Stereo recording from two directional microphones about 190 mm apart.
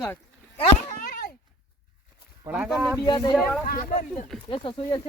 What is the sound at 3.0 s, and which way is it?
Speech, 25° left (ahead or behind).